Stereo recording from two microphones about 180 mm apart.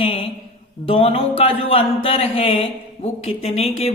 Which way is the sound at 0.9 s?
30° left (ahead or behind).